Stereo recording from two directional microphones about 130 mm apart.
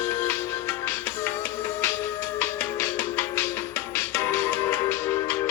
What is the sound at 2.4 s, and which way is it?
Music, 20° left (ahead or behind).